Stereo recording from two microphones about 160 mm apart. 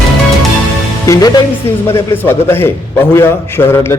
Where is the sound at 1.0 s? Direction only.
20° left (ahead or behind).